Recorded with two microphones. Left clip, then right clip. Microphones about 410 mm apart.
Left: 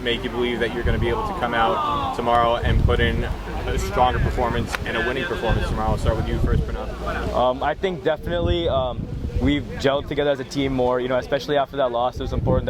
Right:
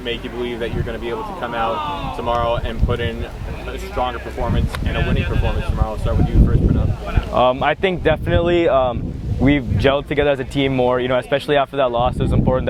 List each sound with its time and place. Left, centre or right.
0.0 s speech: centre
7.3 s speech: right